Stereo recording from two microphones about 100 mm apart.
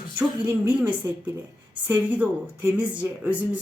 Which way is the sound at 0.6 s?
15° right (ahead or behind).